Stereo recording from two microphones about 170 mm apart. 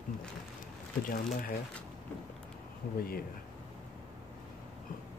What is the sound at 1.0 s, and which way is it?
Speech, 55° left (ahead or behind).